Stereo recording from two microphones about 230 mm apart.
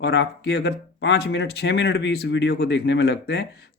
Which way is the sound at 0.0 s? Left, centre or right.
Left.